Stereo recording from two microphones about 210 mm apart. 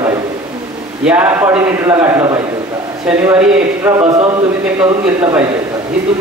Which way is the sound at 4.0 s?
30° right (ahead or behind).